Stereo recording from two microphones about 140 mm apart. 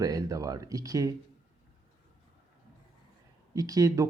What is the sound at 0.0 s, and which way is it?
A man's voice, 25° right (ahead or behind).